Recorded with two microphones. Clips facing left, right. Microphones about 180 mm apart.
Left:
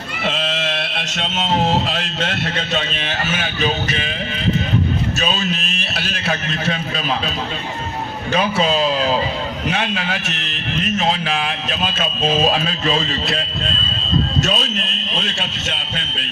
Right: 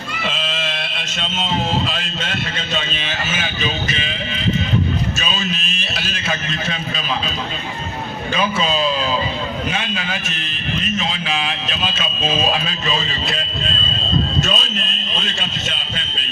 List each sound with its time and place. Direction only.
0.3 s speech: 65° left (ahead or behind)
5.2 s a man's voice: 60° left (ahead or behind)
8.3 s a man's voice: 70° left (ahead or behind); by 12.3 s 55° left (ahead or behind)
14.4 s a man's voice: 70° left (ahead or behind)